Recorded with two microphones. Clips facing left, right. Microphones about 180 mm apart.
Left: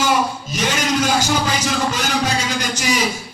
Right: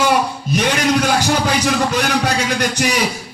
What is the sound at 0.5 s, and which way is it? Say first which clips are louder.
Music: right 5 dB; 65° right (ahead or behind).